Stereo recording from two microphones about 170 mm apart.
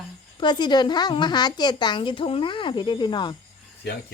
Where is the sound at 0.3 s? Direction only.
25° left (ahead or behind).